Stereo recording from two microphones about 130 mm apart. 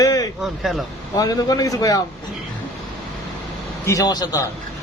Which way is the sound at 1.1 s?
30° left (ahead or behind).